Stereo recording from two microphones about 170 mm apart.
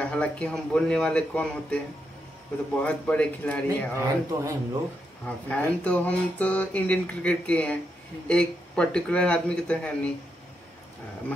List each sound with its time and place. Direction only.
0.0 s speech: 5° left (ahead or behind)
3.6 s speech: 15° right (ahead or behind)
5.2 s speech: 10° left (ahead or behind)